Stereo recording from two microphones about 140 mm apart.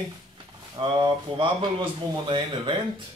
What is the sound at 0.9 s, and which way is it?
Speech, 35° right (ahead or behind).